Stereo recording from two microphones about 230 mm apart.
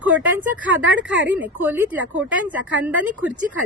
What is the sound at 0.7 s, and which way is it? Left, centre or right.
Speech, right.